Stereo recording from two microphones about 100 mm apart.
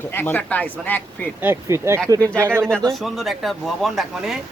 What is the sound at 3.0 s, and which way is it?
Speech, centre (ahead or behind).